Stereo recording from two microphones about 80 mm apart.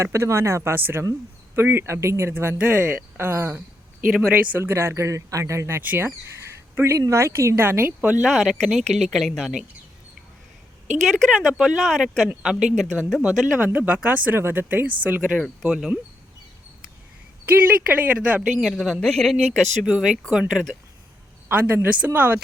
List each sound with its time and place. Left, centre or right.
0.0 s speech: right
5.8 s speech: right
6.7 s speech: right
8.2 s speech: centre
11.0 s speech: centre
13.7 s speech: centre
14.3 s speech: right
15.4 s speech: centre
17.4 s speech: right
18.4 s speech: centre; by 22.4 s right